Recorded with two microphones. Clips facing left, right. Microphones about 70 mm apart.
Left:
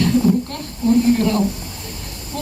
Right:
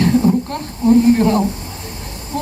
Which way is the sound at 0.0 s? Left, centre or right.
Right.